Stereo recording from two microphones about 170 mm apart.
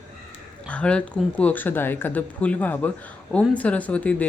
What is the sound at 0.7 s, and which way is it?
Speech, 5° left (ahead or behind).